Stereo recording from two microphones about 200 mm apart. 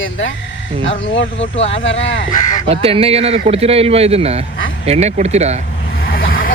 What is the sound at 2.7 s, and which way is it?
A man's voice, 30° right (ahead or behind).